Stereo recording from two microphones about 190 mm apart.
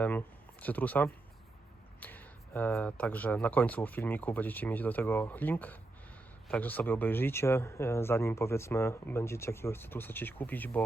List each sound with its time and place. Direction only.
0.0 s speech: 10° left (ahead or behind)